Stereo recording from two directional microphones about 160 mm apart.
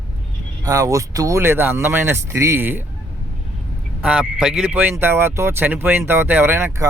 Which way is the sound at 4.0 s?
5° right (ahead or behind).